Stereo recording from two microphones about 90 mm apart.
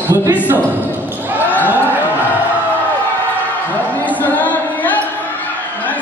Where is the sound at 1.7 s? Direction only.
20° right (ahead or behind).